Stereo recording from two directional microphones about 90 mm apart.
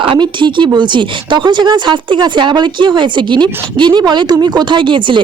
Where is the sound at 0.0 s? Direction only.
70° right (ahead or behind).